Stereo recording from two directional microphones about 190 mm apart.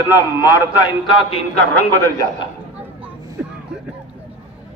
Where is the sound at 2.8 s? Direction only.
10° right (ahead or behind).